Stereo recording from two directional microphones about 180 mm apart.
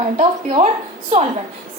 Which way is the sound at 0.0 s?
35° right (ahead or behind).